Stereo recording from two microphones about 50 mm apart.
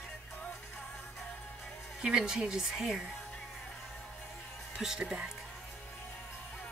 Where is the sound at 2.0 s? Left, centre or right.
Centre.